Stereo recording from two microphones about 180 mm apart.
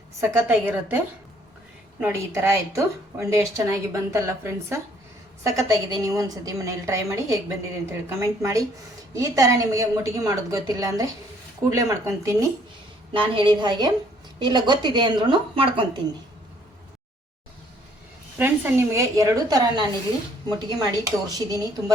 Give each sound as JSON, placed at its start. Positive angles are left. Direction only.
{"t": 0.2, "sound": "a woman's voice", "side_deg": -10}
{"t": 2.0, "sound": "a woman's voice", "side_deg": -15}
{"t": 18.3, "sound": "a woman's voice", "side_deg": -10}